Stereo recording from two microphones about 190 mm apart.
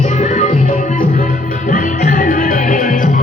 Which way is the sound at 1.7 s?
45° left (ahead or behind).